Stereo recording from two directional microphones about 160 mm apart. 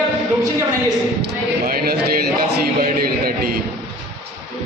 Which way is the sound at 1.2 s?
70° right (ahead or behind).